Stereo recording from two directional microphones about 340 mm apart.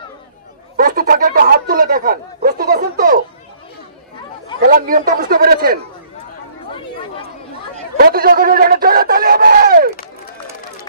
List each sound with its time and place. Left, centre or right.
0.7 s a sound: right
4.6 s speech: right
7.7 s speech: right